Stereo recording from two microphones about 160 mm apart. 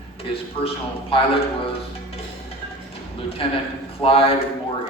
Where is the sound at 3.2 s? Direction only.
35° left (ahead or behind).